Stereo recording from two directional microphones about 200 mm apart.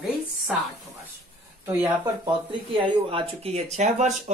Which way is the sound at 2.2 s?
25° right (ahead or behind).